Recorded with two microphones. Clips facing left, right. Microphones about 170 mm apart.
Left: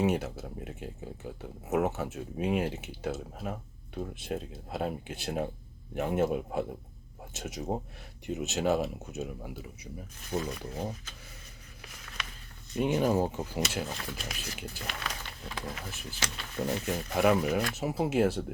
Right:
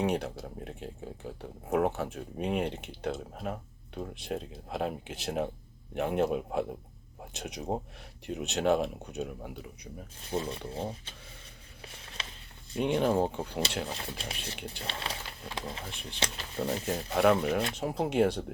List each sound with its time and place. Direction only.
0.0 s speech: 5° left (ahead or behind)
10.2 s speech: 30° right (ahead or behind)
11.9 s a sound: 30° right (ahead or behind)
12.7 s speech: 5° left (ahead or behind)
13.8 s speech: 30° right (ahead or behind)
15.9 s speech: 5° left (ahead or behind)
16.1 s speech: 30° right (ahead or behind)
17.2 s speech: 5° left (ahead or behind)